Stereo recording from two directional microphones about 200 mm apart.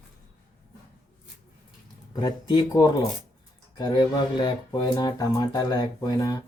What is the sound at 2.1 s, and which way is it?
Speech, 25° left (ahead or behind).